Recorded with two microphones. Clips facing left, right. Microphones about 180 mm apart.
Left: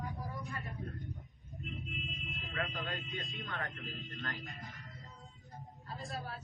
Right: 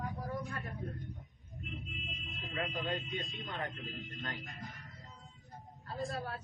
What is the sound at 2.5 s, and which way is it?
A man's voice, 25° right (ahead or behind).